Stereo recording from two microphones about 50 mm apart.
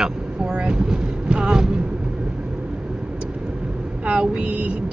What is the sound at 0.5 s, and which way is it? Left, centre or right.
Speech, centre.